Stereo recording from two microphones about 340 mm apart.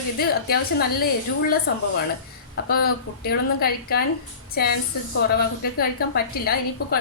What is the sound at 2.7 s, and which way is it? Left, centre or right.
A woman's voice, left.